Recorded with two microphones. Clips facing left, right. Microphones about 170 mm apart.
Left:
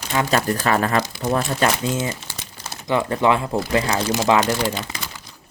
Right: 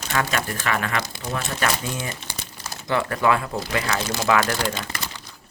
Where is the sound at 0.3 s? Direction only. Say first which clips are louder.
Left 6 dB; 35° left (ahead or behind); by 4.8 s 20° left (ahead or behind).